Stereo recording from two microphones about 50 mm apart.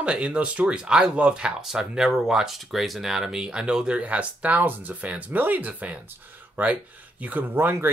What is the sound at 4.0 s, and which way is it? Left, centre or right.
Speech, right.